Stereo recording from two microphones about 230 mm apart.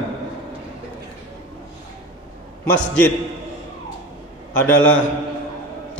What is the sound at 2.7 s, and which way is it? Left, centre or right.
Speech, centre.